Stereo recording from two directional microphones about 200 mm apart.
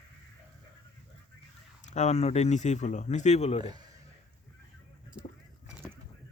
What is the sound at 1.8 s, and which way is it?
Speech, 35° left (ahead or behind).